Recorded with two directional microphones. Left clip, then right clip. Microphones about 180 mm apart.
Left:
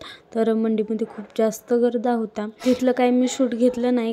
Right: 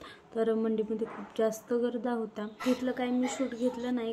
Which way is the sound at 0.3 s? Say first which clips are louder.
Left 8 dB; 40° left (ahead or behind).